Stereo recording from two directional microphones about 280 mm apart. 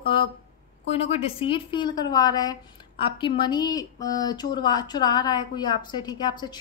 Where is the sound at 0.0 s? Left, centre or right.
Centre.